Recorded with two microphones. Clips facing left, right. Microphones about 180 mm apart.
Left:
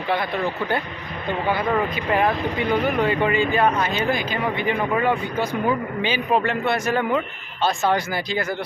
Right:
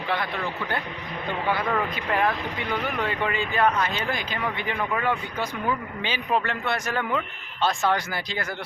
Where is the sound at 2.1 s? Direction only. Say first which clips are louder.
Left 4 dB; 15° left (ahead or behind).